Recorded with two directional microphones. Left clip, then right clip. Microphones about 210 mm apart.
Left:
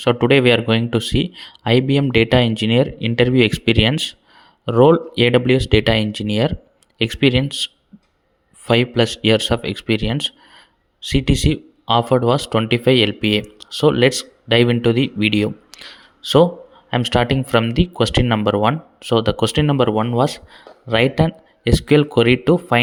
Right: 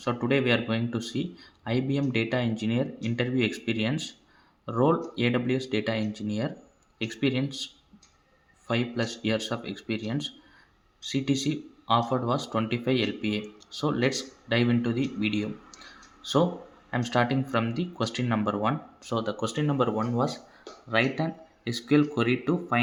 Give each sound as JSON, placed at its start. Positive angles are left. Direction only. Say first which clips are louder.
{"t": 0.0, "sound": "speech", "louder": "left 13 dB", "side_deg": 40}